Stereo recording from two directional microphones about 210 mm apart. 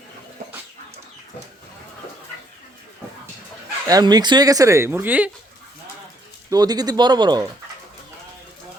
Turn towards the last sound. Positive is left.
turn(degrees=-20)  # may be behind; listen again after turning